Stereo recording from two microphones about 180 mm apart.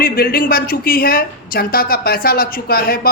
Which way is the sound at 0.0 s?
55° left (ahead or behind).